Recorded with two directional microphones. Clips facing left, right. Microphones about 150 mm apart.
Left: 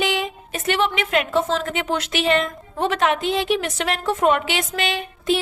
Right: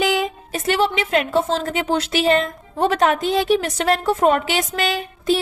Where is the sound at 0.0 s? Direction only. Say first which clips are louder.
Right 3 dB; 40° right (ahead or behind).